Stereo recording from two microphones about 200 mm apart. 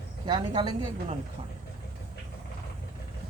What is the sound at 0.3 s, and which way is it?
Speech, 20° right (ahead or behind).